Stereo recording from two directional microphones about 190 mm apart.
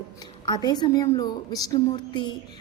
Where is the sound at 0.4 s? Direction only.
20° left (ahead or behind).